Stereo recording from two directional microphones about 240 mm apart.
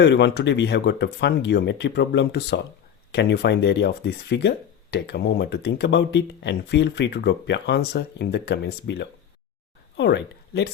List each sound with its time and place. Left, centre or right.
0.0 s speech: left